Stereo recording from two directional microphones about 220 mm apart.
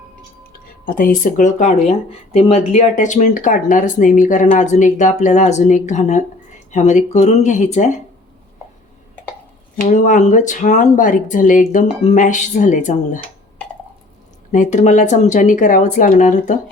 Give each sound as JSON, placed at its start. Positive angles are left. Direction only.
{"t": 0.9, "sound": "speech", "side_deg": 40}
{"t": 9.9, "sound": "speech", "side_deg": 35}
{"t": 14.5, "sound": "speech", "side_deg": 35}